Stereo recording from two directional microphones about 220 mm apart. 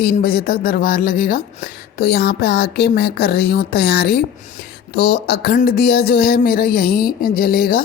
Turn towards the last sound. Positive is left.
turn(degrees=40)  # may be behind; listen again after turning